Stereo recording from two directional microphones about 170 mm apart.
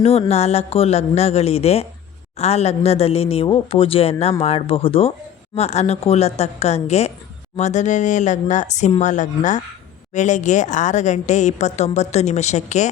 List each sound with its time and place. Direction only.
0.0 s a woman's voice: 35° left (ahead or behind)